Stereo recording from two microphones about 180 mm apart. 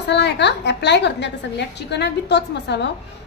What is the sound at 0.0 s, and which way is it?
A woman's voice, 75° left (ahead or behind).